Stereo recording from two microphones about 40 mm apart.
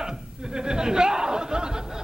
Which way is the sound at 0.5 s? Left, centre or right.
Centre.